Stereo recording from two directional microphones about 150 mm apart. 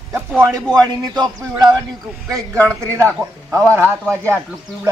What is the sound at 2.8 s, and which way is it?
Speech, 15° right (ahead or behind).